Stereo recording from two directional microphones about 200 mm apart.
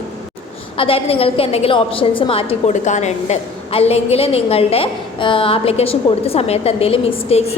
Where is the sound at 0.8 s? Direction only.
30° left (ahead or behind).